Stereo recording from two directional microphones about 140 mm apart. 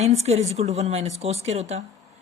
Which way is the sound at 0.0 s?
50° right (ahead or behind).